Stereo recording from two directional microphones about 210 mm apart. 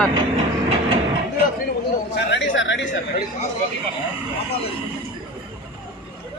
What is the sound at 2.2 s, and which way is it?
Chatter, 55° left (ahead or behind).